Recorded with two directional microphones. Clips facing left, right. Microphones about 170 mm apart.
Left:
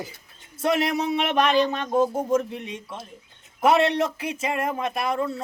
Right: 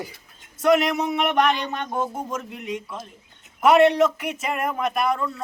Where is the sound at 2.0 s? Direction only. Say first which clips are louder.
Left 6 dB; 30° left (ahead or behind).